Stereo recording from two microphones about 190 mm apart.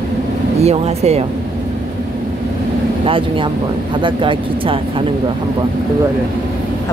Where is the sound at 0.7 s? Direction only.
35° right (ahead or behind).